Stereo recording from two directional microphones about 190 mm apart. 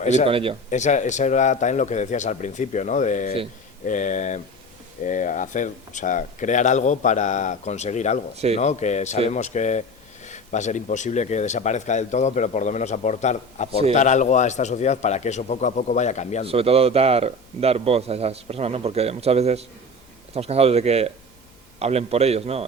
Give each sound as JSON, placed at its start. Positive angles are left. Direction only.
{"t": 0.0, "sound": "speech", "side_deg": 35}
{"t": 0.3, "sound": "speech", "side_deg": -30}
{"t": 0.7, "sound": "speech", "side_deg": 40}
{"t": 16.5, "sound": "speech", "side_deg": -30}